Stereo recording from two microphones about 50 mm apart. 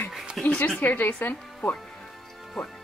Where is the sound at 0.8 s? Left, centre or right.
Left.